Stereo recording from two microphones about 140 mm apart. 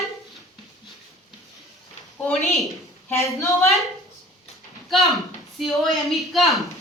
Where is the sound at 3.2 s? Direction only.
20° left (ahead or behind).